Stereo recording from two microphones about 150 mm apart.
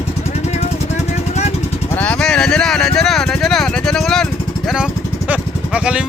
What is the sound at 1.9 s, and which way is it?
Speech, 10° left (ahead or behind).